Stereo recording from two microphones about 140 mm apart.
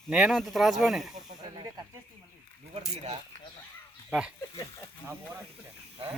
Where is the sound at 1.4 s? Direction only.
35° right (ahead or behind).